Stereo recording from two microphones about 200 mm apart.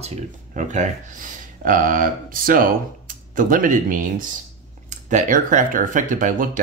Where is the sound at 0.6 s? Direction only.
40° right (ahead or behind).